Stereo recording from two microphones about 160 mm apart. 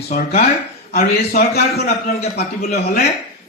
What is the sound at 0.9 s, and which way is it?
Speech, 65° left (ahead or behind).